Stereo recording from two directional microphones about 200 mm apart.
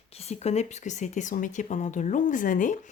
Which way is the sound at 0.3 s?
35° left (ahead or behind).